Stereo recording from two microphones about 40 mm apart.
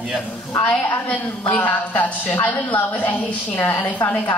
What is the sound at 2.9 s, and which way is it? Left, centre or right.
A woman's voice, left.